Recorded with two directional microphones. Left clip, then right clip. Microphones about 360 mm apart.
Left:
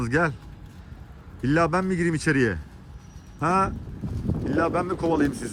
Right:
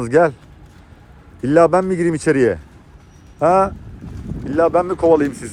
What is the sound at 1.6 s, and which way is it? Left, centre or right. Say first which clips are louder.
Speech: right 11 dB; centre.